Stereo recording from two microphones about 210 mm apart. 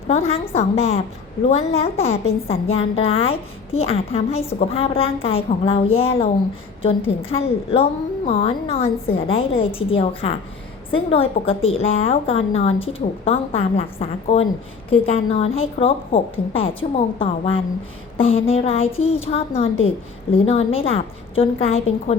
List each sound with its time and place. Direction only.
0.1 s a woman's voice: 30° left (ahead or behind)